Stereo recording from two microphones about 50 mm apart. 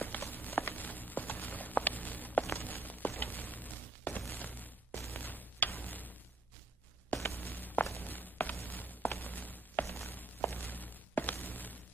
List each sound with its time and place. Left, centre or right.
0.0 s walk: left
2.4 s a sound: left
7.3 s walk: left
8.6 s a sound: left
9.8 s walk: left
10.5 s walk: left